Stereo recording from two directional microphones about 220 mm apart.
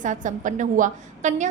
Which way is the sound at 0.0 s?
35° right (ahead or behind).